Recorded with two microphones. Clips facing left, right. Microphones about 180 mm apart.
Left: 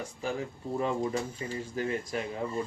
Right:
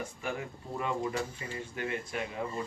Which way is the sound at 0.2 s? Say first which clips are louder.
Left 3 dB; 35° left (ahead or behind).